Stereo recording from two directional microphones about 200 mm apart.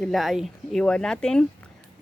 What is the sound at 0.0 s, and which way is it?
Speech, centre (ahead or behind).